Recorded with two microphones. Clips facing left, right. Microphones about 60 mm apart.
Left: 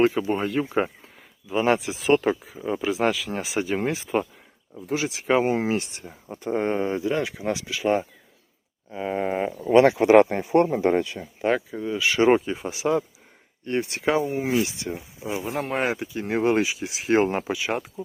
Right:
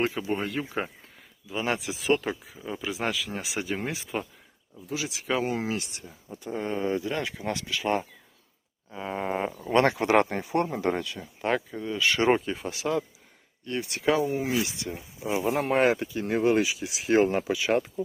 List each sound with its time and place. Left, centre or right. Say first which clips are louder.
0.2 s speech: left 5 dB; centre
1.5 s speech: left 7 dB; left
10.4 s speech: left 7 dB; left
11.2 s speech: left 4 dB; centre
13.7 s speech: left 2 dB; left
15.3 s speech: right 2 dB; centre
16.3 s speech: left 2 dB; left
17.7 s speech: right 3 dB; centre